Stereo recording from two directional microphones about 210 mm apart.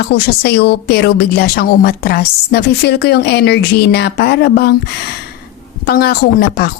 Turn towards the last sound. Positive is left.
turn(degrees=45)  # may be behind; listen again after turning